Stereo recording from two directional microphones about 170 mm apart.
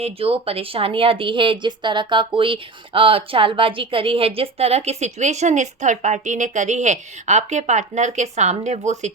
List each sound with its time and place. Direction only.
0.0 s speech: 35° right (ahead or behind)